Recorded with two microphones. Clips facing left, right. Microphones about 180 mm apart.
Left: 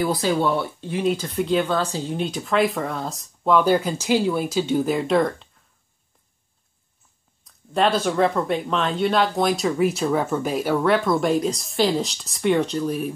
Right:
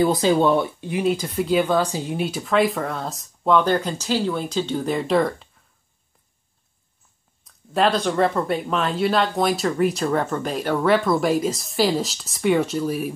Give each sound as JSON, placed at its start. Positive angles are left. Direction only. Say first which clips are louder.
{"t": 0.0, "sound": "speech", "louder": "right 4 dB", "side_deg": -20}
{"t": 7.4, "sound": "speech", "louder": "right 1 dB", "side_deg": 0}